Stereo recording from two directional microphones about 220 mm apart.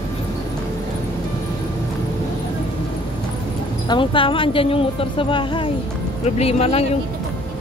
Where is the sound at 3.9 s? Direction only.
25° left (ahead or behind).